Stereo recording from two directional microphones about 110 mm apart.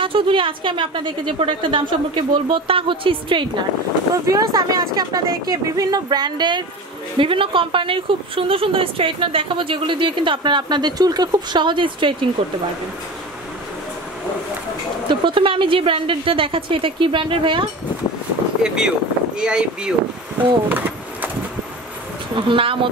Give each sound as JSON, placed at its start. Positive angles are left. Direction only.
{"t": 0.0, "sound": "a woman's voice", "side_deg": -55}
{"t": 4.1, "sound": "speech", "side_deg": -35}
{"t": 7.2, "sound": "a woman's voice", "side_deg": -50}
{"t": 15.0, "sound": "a woman's voice", "side_deg": -50}
{"t": 18.6, "sound": "speech", "side_deg": -5}
{"t": 20.3, "sound": "a sound", "side_deg": -15}
{"t": 22.3, "sound": "a woman's voice", "side_deg": -50}